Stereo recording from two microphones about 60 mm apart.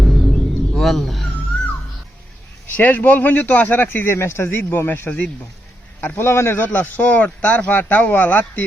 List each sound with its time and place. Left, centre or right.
0.0 s music: centre
2.6 s speech: left
3.8 s a man's voice: left
5.0 s speech: left
6.0 s a man's voice: left
6.7 s speech: left